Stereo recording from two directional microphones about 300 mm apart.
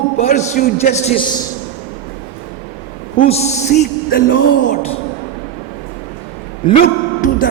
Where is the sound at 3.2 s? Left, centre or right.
Left.